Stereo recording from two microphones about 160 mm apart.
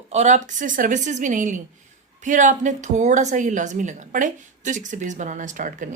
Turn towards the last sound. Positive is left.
turn(degrees=-55)  # may be behind; listen again after turning